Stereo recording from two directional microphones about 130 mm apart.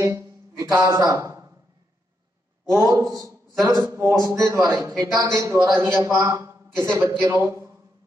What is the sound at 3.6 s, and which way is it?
A man's voice, 15° right (ahead or behind).